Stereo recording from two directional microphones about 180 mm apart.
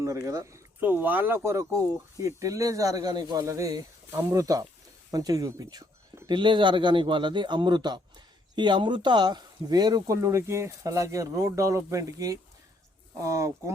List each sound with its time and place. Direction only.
0.0 s speech: 15° right (ahead or behind)